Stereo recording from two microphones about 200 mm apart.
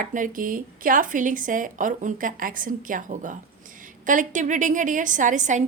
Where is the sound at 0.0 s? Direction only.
40° right (ahead or behind).